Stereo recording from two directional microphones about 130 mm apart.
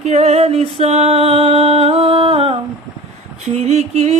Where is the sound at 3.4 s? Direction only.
55° right (ahead or behind).